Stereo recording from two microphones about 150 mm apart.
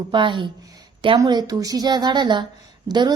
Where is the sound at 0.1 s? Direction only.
30° right (ahead or behind).